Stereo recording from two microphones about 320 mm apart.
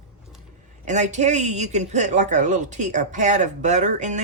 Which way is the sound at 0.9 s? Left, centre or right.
Right.